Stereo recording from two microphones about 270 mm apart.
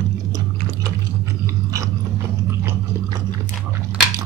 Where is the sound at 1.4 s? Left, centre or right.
Centre.